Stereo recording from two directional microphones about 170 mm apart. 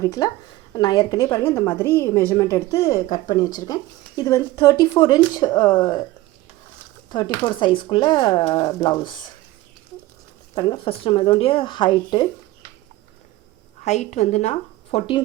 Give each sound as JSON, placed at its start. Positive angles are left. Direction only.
{"t": 0.0, "sound": "a woman's voice", "side_deg": 20}
{"t": 7.1, "sound": "a woman's voice", "side_deg": 25}
{"t": 10.5, "sound": "a woman's voice", "side_deg": 25}
{"t": 13.8, "sound": "speech", "side_deg": 40}